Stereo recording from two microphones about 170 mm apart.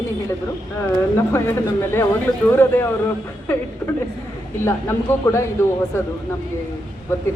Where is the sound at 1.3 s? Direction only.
15° left (ahead or behind).